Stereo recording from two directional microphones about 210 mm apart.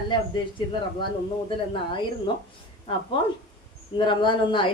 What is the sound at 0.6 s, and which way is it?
Speech, 20° left (ahead or behind).